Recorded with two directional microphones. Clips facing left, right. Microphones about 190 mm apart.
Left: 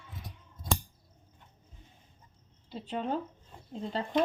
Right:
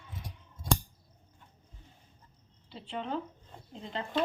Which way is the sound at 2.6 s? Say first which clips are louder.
Left 3 dB; 40° left (ahead or behind).